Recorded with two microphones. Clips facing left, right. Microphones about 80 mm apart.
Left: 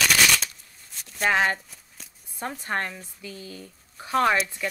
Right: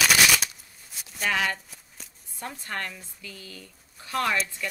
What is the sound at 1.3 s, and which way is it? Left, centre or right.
Speech, left.